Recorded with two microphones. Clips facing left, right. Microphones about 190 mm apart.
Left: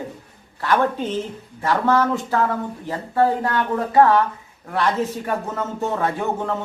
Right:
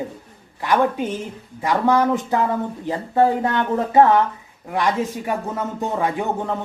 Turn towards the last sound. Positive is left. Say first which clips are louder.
# even
turn(degrees=-15)  # may be behind; listen again after turning